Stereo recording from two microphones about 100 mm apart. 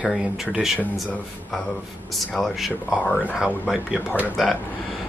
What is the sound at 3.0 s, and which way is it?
Speech, 15° left (ahead or behind).